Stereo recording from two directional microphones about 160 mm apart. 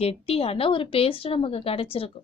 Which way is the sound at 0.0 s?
40° left (ahead or behind).